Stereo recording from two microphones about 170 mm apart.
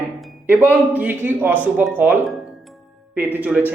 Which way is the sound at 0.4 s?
10° right (ahead or behind).